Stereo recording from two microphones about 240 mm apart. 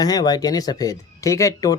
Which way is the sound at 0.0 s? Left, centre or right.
Centre.